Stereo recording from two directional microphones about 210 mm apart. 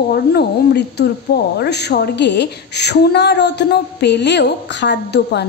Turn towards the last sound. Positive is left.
turn(degrees=55)  # may be behind; listen again after turning